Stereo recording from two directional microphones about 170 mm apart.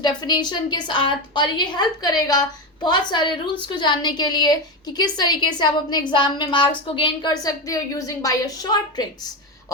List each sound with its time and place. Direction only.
0.0 s a woman's voice: 25° left (ahead or behind)